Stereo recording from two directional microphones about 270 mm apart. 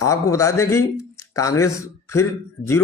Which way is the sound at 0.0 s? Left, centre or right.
Centre.